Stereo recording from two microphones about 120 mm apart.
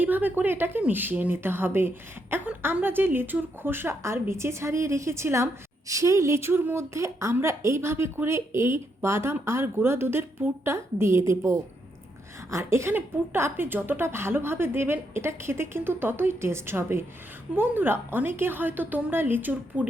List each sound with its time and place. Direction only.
0.0 s a woman's voice: 15° right (ahead or behind)